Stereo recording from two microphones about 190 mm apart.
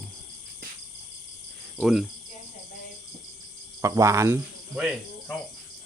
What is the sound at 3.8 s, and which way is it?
Speech, 15° right (ahead or behind).